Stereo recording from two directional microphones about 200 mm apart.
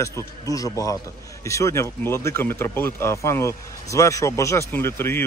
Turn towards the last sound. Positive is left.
turn(degrees=10)  # may be behind; listen again after turning